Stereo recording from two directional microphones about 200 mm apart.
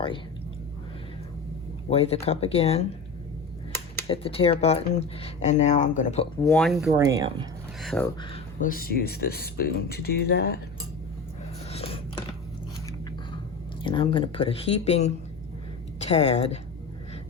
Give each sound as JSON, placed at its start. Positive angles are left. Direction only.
{"t": 1.9, "sound": "speech", "side_deg": 30}
{"t": 4.0, "sound": "speech", "side_deg": 30}
{"t": 6.5, "sound": "speech", "side_deg": 0}
{"t": 6.9, "sound": "speech", "side_deg": -15}
{"t": 7.8, "sound": "speech", "side_deg": 0}
{"t": 8.6, "sound": "speech", "side_deg": 45}
{"t": 11.7, "sound": "scissors", "side_deg": 30}
{"t": 13.8, "sound": "a woman's voice", "side_deg": 25}